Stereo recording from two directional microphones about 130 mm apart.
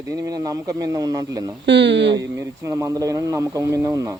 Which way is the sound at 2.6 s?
25° right (ahead or behind).